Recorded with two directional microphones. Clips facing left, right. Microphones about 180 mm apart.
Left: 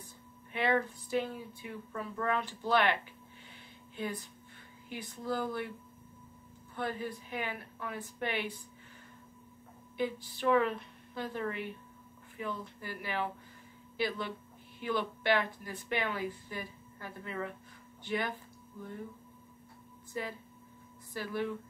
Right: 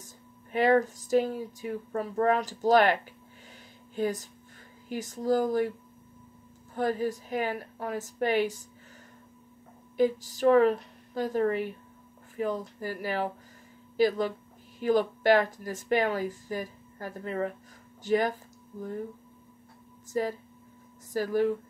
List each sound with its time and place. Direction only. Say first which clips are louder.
0.5 s speech: right 8 dB; 40° right (ahead or behind)
6.7 s speech: right 9 dB; 40° right (ahead or behind)
9.9 s speech: right 9 dB; 40° right (ahead or behind)
20.1 s speech: right 10 dB; 40° right (ahead or behind)